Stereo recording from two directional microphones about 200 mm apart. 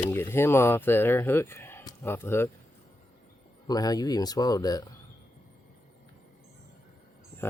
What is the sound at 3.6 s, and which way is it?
Speech, 20° left (ahead or behind).